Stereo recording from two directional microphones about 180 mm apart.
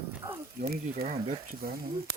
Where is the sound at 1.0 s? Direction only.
40° right (ahead or behind).